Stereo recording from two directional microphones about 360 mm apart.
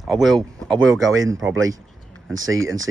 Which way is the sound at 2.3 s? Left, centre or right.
Right.